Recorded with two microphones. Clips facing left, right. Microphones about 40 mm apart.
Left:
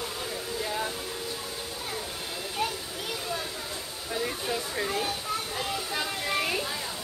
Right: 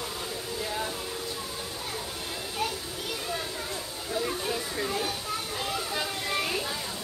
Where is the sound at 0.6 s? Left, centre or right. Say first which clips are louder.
Left 1 dB; centre.